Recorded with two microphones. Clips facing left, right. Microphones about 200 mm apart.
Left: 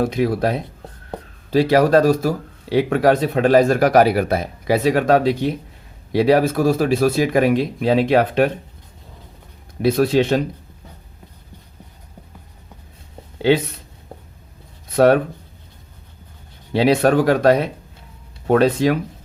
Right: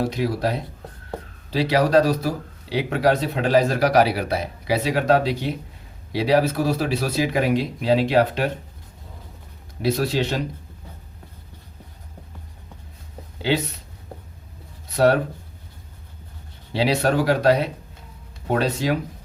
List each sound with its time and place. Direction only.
0.0 s speech: 55° left (ahead or behind)
9.8 s speech: 55° left (ahead or behind)
14.9 s speech: 55° left (ahead or behind)
16.7 s speech: 55° left (ahead or behind)